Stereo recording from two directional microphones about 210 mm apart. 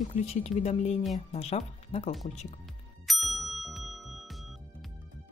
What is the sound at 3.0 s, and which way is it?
Ding, centre (ahead or behind).